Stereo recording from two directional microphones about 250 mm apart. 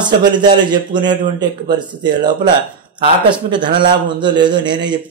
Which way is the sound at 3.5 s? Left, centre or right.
Centre.